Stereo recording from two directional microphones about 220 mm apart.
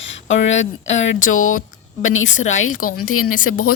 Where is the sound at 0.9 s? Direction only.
60° left (ahead or behind).